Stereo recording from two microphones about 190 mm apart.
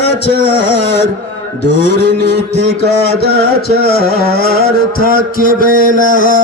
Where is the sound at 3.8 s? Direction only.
55° left (ahead or behind).